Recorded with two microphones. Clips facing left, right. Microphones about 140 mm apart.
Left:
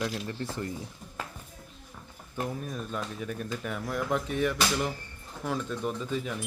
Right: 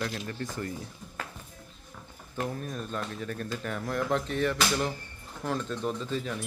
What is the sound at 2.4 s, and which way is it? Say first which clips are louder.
Speech: even; 5° left (ahead or behind).